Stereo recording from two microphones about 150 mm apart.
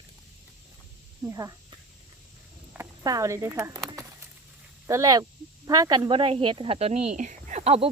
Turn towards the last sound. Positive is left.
turn(degrees=-45)  # may be behind; listen again after turning